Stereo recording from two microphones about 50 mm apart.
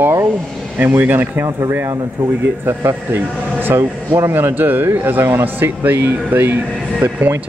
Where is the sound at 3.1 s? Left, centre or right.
Right.